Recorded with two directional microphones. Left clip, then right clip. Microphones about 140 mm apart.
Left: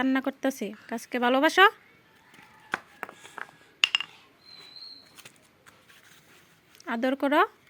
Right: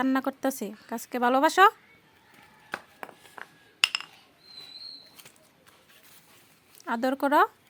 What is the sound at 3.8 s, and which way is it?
Chink, 45° left (ahead or behind).